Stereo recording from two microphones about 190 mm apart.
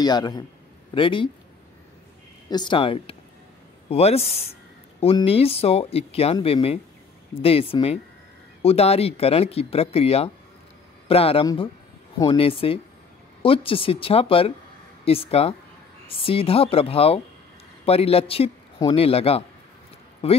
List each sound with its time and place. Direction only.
0.0 s a woman's voice: 20° left (ahead or behind)
2.5 s a woman's voice: 25° left (ahead or behind)